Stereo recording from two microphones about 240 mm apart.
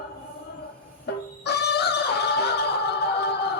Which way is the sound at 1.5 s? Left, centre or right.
Left.